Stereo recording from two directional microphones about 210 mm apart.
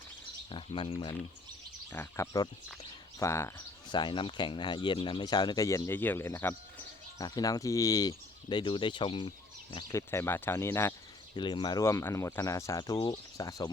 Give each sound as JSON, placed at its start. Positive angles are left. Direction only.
{"t": 0.5, "sound": "speech", "side_deg": 25}
{"t": 1.9, "sound": "speech", "side_deg": 10}